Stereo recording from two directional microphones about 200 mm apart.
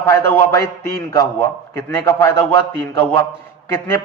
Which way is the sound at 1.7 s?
10° left (ahead or behind).